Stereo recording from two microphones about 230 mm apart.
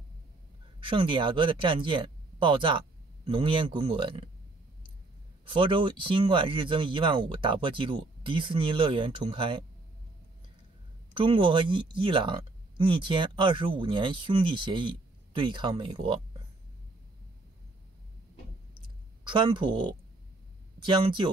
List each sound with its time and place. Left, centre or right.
0.7 s speech: right
5.5 s speech: right
11.1 s speech: right
19.2 s speech: right